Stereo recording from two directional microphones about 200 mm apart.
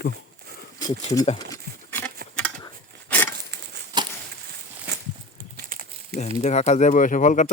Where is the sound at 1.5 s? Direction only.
10° left (ahead or behind).